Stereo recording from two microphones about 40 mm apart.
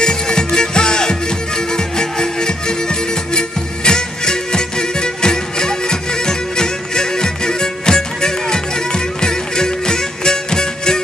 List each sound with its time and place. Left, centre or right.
0.0 s music: centre